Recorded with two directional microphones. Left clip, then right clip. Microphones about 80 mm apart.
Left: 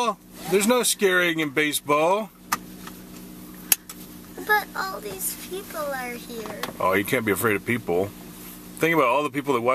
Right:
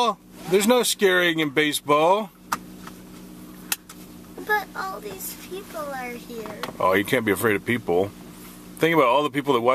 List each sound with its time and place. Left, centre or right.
0.0 s speech: right
4.5 s a child's voice: centre
6.8 s speech: right